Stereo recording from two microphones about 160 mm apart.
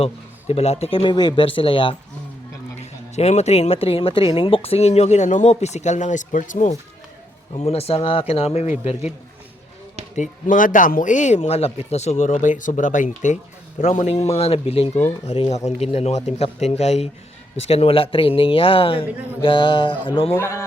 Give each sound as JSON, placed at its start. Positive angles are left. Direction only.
{"t": 0.0, "sound": "speech", "side_deg": 40}
{"t": 3.2, "sound": "speech", "side_deg": 45}
{"t": 7.5, "sound": "speech", "side_deg": 40}
{"t": 10.2, "sound": "speech", "side_deg": 55}
{"t": 20.3, "sound": "speech", "side_deg": 15}